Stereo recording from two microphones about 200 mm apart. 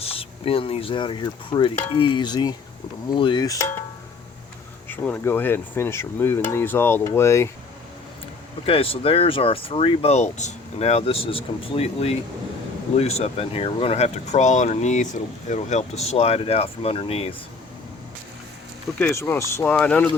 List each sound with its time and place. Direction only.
0.0 s speech: 30° left (ahead or behind)
4.9 s speech: 10° left (ahead or behind)
8.6 s speech: 30° left (ahead or behind)
18.9 s speech: 10° left (ahead or behind)